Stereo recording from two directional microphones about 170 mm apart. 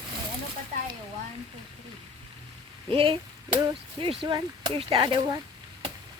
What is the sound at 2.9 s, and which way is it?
Speech, 30° right (ahead or behind).